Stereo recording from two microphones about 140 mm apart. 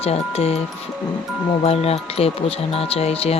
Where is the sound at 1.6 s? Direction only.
45° left (ahead or behind).